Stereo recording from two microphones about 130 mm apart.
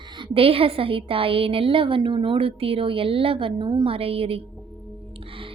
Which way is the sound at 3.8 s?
45° right (ahead or behind).